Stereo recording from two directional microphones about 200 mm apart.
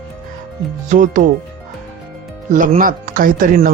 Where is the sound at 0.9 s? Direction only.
40° right (ahead or behind).